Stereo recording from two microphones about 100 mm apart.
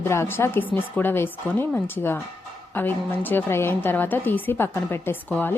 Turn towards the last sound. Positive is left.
turn(degrees=15)  # may be behind; listen again after turning